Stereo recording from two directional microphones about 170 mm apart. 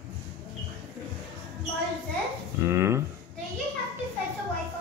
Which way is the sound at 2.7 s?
15° right (ahead or behind).